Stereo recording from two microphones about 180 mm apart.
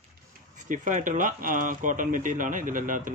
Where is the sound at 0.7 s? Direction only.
45° right (ahead or behind).